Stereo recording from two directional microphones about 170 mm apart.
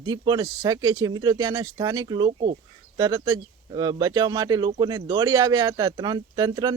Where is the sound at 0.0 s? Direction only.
25° right (ahead or behind).